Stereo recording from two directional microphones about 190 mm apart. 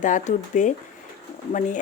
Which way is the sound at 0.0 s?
40° left (ahead or behind).